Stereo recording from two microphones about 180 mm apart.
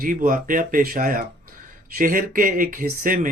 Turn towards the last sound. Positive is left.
turn(degrees=-50)  # may be behind; listen again after turning